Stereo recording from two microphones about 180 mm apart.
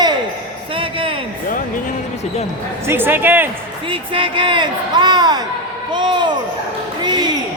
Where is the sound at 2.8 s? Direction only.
10° right (ahead or behind).